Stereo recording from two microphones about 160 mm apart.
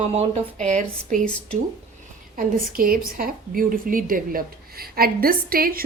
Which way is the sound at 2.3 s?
65° right (ahead or behind).